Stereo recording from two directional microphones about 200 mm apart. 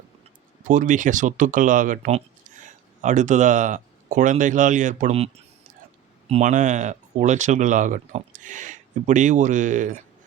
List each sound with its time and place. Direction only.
0.7 s speech: 40° right (ahead or behind)